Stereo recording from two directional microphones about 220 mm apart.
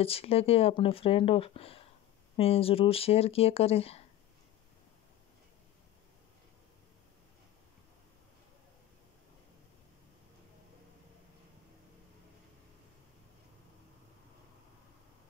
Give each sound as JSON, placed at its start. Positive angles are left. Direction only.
{"t": 0.0, "sound": "speech", "side_deg": 25}